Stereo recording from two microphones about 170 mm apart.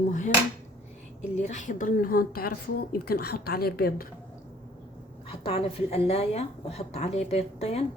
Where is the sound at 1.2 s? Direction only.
45° left (ahead or behind); by 4.0 s 65° left (ahead or behind).